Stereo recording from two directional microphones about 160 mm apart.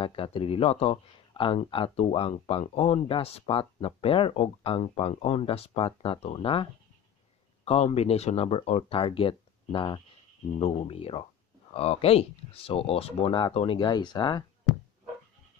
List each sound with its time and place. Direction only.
0.0 s speech: 35° left (ahead or behind)